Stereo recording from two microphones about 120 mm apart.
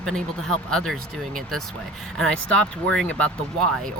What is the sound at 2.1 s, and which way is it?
Speech, 5° left (ahead or behind).